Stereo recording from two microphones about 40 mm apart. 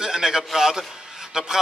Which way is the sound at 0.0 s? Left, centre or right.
Centre.